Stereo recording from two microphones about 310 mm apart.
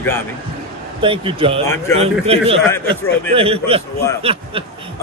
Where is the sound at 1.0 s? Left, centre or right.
Centre.